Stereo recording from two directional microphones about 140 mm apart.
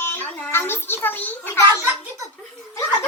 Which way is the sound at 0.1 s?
10° left (ahead or behind).